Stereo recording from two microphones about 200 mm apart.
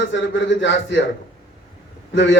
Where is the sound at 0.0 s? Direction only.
65° left (ahead or behind).